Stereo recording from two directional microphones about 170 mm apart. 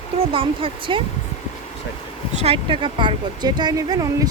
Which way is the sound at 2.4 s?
35° right (ahead or behind).